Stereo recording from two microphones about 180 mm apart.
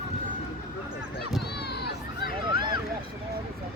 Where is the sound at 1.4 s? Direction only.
65° left (ahead or behind).